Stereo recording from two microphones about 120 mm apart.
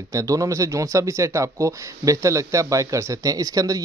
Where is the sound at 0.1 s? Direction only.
30° right (ahead or behind).